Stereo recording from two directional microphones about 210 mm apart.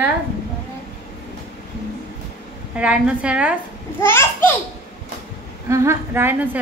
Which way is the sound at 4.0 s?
10° left (ahead or behind).